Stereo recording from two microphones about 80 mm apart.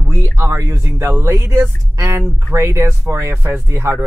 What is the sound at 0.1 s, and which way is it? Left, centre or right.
Speech, right.